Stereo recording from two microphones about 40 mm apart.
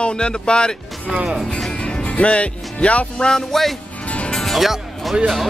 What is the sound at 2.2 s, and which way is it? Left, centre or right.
Music, left.